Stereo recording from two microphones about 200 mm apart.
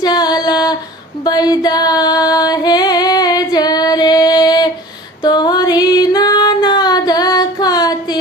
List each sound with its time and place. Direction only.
0.0 s female singing: 20° left (ahead or behind)
1.2 s music: 20° left (ahead or behind)
5.2 s female singing: 20° left (ahead or behind)